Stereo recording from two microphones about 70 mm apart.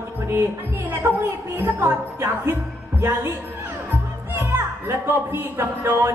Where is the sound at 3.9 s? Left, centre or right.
Right.